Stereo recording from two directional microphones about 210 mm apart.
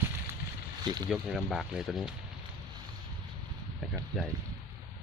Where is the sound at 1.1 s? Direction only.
Centre (ahead or behind).